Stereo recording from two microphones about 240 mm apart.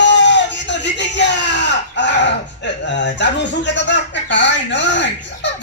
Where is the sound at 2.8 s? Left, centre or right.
Left.